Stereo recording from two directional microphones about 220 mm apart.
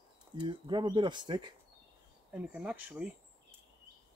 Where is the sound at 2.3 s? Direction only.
5° right (ahead or behind).